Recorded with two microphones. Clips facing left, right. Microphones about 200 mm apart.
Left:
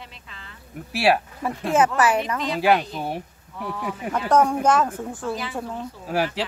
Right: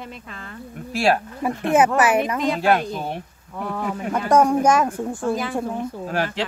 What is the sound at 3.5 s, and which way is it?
Speech, 50° right (ahead or behind).